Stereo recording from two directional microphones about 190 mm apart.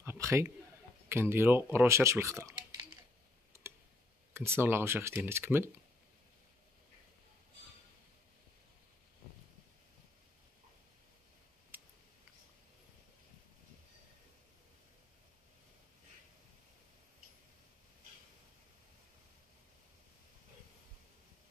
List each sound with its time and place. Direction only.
0.0 s a sound: 15° right (ahead or behind)
1.0 s speech: 10° right (ahead or behind)
3.5 s tick: 15° right (ahead or behind)
4.3 s speech: 15° right (ahead or behind)
11.7 s tick: 10° right (ahead or behind)